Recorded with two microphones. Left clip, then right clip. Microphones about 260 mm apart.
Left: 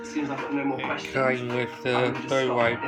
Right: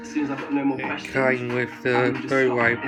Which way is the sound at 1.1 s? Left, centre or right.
Centre.